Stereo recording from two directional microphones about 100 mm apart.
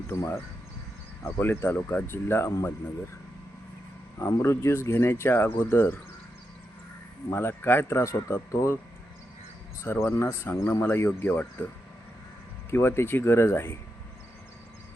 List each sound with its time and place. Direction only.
0.1 s speech: 20° left (ahead or behind)
4.3 s speech: 25° left (ahead or behind)
7.3 s speech: 25° left (ahead or behind)
9.8 s speech: 25° left (ahead or behind)
12.7 s speech: 25° left (ahead or behind)